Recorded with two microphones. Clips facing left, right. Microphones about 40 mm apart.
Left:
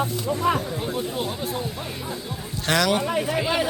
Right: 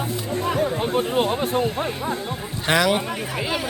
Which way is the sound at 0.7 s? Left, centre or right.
Right.